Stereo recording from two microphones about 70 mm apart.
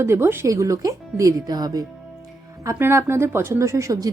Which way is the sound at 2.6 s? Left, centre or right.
Right.